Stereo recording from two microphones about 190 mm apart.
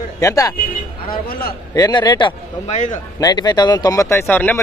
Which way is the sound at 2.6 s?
40° left (ahead or behind).